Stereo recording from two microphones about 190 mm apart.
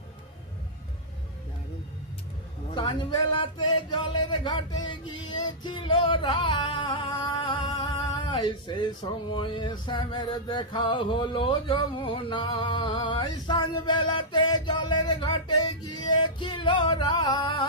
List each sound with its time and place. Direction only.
2.7 s music: 25° left (ahead or behind)
5.3 s singing: 25° left (ahead or behind)
9.3 s music: 25° left (ahead or behind)